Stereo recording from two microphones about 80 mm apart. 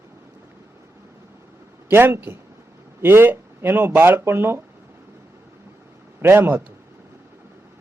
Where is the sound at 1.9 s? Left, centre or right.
Right.